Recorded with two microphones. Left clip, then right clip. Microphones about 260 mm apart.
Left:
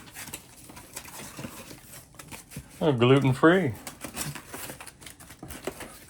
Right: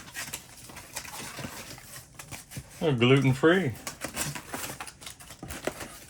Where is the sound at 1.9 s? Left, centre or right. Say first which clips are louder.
Right 1 dB; centre.